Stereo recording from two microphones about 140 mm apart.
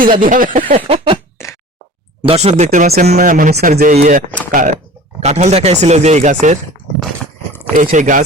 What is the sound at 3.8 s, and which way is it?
Speech, 60° right (ahead or behind).